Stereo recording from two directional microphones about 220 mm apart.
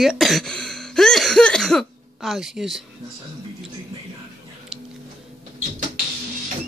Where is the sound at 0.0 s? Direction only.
Centre (ahead or behind).